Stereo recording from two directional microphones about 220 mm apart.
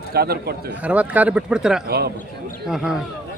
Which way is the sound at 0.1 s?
45° right (ahead or behind).